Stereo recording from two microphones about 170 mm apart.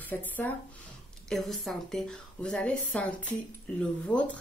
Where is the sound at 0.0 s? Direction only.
10° left (ahead or behind).